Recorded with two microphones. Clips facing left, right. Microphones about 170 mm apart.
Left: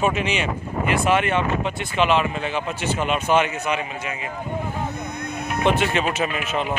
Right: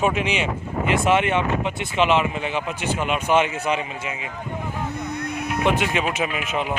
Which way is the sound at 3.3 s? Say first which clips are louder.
Right 3 dB; 25° right (ahead or behind).